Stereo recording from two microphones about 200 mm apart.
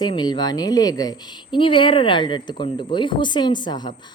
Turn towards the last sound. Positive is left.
turn(degrees=20)  # may be behind; listen again after turning